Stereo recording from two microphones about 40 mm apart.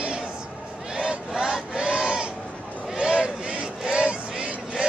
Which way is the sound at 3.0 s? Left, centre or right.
Right.